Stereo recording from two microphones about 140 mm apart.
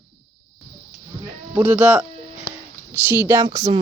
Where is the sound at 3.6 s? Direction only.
25° right (ahead or behind).